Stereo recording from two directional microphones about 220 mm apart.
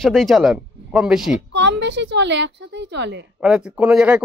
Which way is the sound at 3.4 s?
5° right (ahead or behind).